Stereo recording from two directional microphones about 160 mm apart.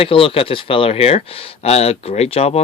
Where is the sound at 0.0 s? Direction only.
35° left (ahead or behind).